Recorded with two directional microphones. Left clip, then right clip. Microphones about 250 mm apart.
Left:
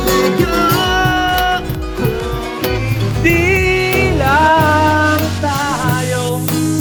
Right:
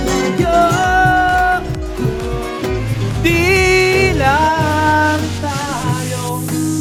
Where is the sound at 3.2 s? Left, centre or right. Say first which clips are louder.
Right 1 dB; centre.